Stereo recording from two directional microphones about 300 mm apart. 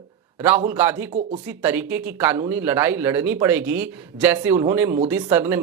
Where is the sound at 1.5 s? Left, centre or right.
Centre.